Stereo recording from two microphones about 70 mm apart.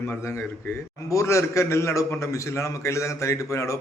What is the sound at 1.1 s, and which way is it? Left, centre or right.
A man's voice, left.